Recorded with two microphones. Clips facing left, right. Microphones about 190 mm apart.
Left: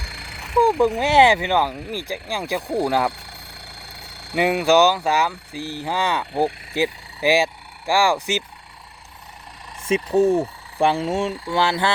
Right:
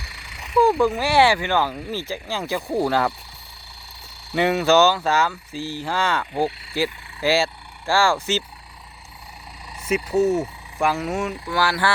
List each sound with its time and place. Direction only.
0.0 s a sound: 75° left (ahead or behind)
0.6 s speech: 20° left (ahead or behind)
3.1 s vehicle: 70° left (ahead or behind)
4.4 s speech: 10° left (ahead or behind)
9.8 s speech: 30° left (ahead or behind)